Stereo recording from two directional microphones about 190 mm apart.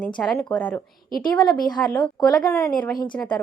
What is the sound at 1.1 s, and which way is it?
Speech, 50° left (ahead or behind).